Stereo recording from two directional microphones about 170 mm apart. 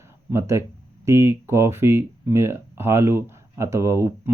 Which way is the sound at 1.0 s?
15° right (ahead or behind).